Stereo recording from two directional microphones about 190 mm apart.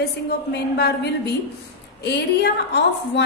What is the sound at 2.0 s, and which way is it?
A woman's voice, 65° left (ahead or behind).